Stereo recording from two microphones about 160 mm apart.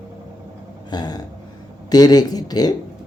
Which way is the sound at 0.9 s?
25° left (ahead or behind).